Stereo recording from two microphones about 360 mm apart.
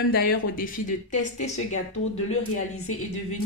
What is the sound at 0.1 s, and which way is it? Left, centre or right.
Speech, left.